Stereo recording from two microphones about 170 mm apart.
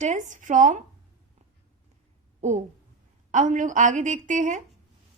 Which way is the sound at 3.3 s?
45° right (ahead or behind).